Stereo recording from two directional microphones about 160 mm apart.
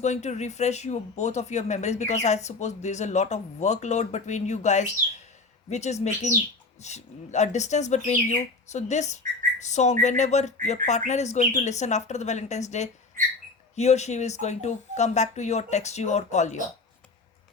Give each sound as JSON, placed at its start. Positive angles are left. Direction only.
{"t": 0.0, "sound": "speech", "side_deg": 45}